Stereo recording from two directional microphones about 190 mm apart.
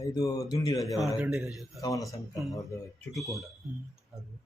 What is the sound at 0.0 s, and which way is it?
Speech, 15° left (ahead or behind).